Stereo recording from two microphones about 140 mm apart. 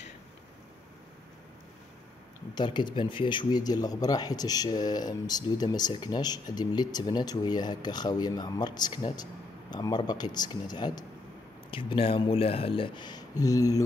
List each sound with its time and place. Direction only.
2.5 s speech: 35° left (ahead or behind)